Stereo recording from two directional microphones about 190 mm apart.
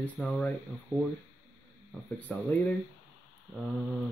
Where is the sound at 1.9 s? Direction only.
10° left (ahead or behind).